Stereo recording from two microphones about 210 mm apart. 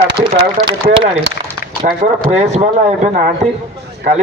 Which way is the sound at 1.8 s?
40° right (ahead or behind).